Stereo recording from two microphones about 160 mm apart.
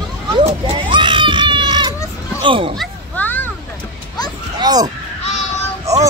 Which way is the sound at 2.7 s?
5° left (ahead or behind).